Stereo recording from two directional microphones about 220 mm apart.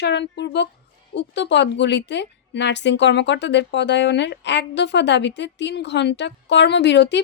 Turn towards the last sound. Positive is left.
turn(degrees=50)  # may be behind; listen again after turning